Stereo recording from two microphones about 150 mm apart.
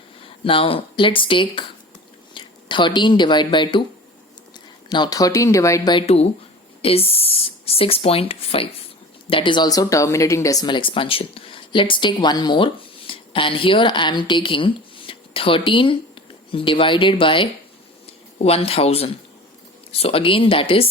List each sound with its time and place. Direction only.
0.2 s speech: 35° left (ahead or behind)